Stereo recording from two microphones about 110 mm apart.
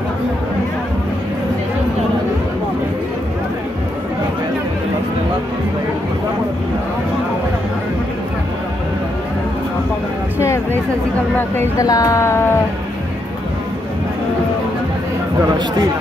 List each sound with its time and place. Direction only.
10.4 s music: 25° left (ahead or behind)
11.3 s a woman's voice: 20° left (ahead or behind)
11.8 s a woman's voice: 30° left (ahead or behind)